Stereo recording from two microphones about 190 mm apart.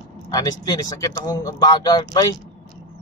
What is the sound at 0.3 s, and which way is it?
Speech, 20° left (ahead or behind).